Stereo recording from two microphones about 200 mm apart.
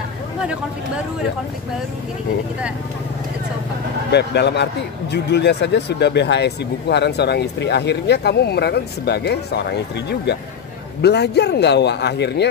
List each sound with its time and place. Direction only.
4.1 s speech: 55° left (ahead or behind)